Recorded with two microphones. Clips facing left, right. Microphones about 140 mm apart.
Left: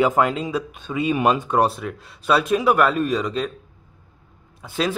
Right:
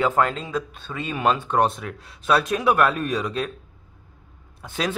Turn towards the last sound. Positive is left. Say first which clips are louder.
# left 3 dB
turn(degrees=0)  # may be behind; listen again after turning